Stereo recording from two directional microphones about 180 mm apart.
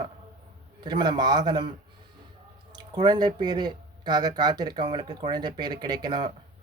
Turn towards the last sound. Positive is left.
turn(degrees=-25)  # may be behind; listen again after turning